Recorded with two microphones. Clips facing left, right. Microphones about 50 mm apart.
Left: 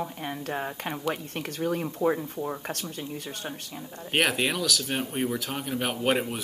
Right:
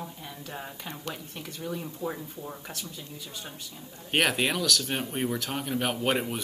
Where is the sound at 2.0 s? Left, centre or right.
Left.